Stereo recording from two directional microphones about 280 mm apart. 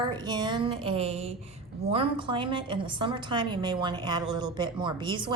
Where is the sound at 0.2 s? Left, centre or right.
Centre.